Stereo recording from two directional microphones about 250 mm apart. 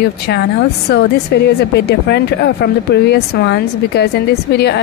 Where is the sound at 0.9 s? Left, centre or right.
Left.